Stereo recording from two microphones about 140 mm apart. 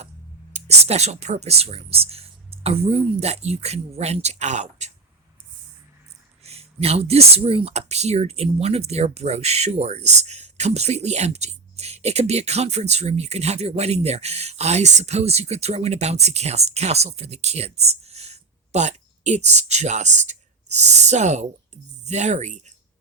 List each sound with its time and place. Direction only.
0.5 s speech: 50° right (ahead or behind)
6.4 s speech: 45° right (ahead or behind)